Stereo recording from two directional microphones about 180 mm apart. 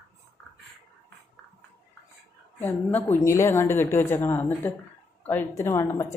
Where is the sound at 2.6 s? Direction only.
10° left (ahead or behind).